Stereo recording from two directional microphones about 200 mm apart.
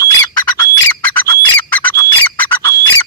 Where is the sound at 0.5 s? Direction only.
15° left (ahead or behind).